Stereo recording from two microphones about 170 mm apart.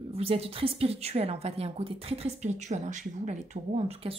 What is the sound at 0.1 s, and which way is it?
A woman's voice, 35° right (ahead or behind).